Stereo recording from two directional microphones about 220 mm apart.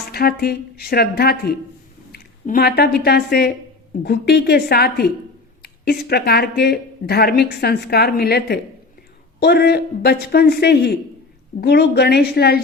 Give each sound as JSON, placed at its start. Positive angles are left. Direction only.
{"t": 0.1, "sound": "speech", "side_deg": 45}